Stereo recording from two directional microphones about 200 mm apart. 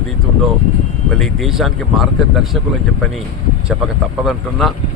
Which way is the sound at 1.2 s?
Centre (ahead or behind).